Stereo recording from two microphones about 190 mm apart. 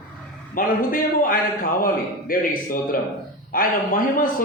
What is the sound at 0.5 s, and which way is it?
A man's voice, 50° left (ahead or behind).